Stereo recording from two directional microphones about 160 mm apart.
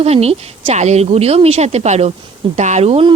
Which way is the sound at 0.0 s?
40° right (ahead or behind).